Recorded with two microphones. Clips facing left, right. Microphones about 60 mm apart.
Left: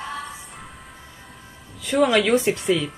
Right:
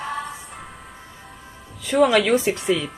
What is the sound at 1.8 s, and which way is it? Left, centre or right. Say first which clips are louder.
A woman's voice: right 1 dB; centre.